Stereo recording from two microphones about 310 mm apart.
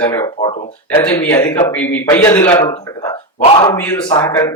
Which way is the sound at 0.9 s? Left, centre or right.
Centre.